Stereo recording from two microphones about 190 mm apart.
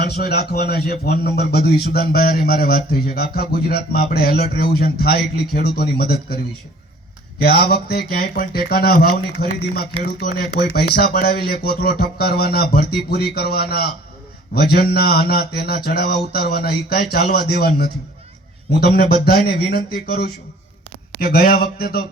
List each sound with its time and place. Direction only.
0.2 s a man's voice: 55° left (ahead or behind)
7.4 s a man's voice: 55° left (ahead or behind)
19.2 s a man's voice: 55° left (ahead or behind)